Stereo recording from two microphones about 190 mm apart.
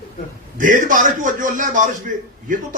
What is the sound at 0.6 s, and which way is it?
A man's voice, 45° right (ahead or behind).